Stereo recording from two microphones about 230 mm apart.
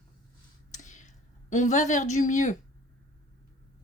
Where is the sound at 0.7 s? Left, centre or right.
Left.